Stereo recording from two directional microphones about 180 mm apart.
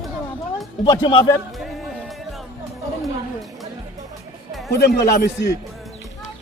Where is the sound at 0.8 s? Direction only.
25° left (ahead or behind).